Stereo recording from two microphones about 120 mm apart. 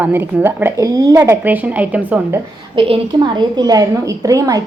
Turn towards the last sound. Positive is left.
turn(degrees=-30)  # may be behind; listen again after turning